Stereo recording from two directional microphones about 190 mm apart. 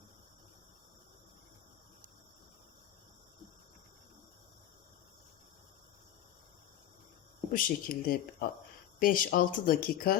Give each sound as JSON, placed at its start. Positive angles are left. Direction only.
{"t": 7.5, "sound": "speech", "side_deg": 50}